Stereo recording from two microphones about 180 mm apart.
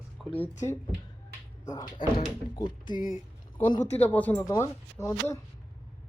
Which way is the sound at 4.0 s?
10° left (ahead or behind).